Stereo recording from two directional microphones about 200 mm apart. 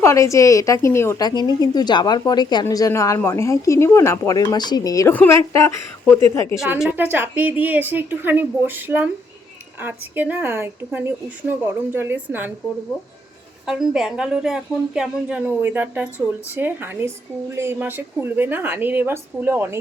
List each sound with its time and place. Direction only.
0.0 s a woman's voice: 15° left (ahead or behind)
6.6 s a woman's voice: centre (ahead or behind)
13.7 s a woman's voice: centre (ahead or behind)